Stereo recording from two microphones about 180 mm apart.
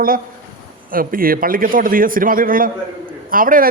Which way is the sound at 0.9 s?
55° right (ahead or behind).